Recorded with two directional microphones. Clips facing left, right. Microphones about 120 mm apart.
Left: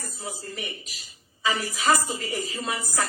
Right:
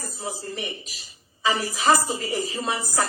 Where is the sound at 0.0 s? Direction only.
35° right (ahead or behind).